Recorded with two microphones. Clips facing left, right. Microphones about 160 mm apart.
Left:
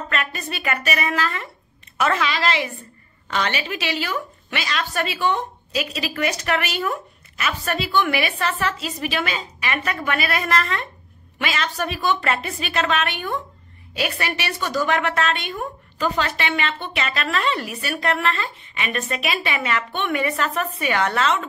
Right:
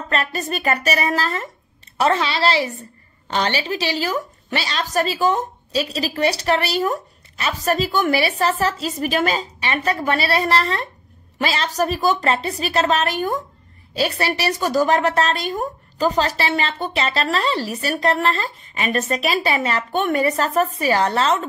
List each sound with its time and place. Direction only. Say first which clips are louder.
0.1 s a woman's voice: right 7 dB; 35° right (ahead or behind)